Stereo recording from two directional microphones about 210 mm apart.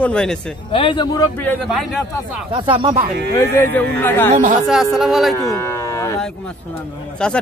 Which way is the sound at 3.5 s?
10° left (ahead or behind).